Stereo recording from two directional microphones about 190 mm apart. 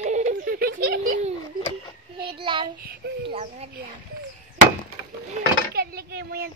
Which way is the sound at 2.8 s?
60° right (ahead or behind).